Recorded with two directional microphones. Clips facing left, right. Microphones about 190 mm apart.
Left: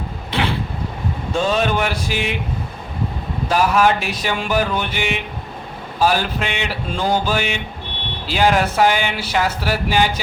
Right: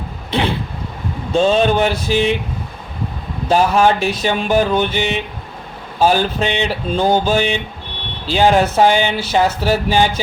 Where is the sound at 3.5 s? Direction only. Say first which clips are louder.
Right 3 dB; 30° right (ahead or behind).